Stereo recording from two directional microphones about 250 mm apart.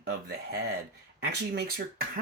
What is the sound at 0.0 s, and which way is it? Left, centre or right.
Speech, right.